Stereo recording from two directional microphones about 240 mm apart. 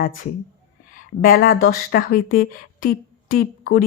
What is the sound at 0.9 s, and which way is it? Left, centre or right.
Speech, left.